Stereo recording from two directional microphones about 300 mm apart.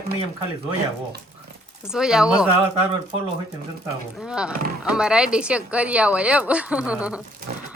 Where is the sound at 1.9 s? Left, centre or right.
Centre.